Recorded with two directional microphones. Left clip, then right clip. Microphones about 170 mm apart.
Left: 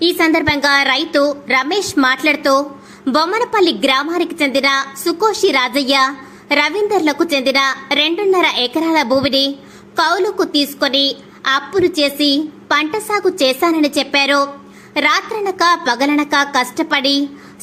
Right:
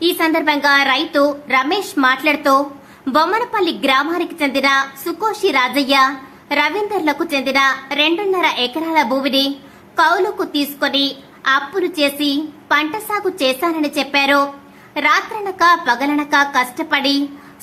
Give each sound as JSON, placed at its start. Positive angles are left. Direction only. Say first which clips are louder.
{"t": 0.0, "sound": "a woman's voice", "louder": "left 2 dB", "side_deg": 25}